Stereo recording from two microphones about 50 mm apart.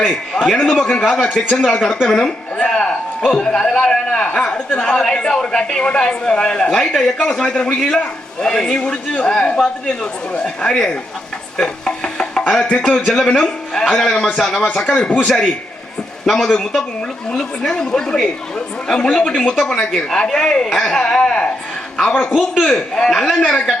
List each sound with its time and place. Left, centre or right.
0.6 s a man's voice: centre
11.5 s music: centre
13.1 s a woman's voice: centre
14.8 s speech: left
15.2 s a woman's voice: centre